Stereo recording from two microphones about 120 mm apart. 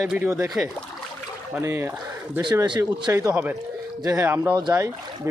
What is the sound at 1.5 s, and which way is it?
Speech, 20° right (ahead or behind).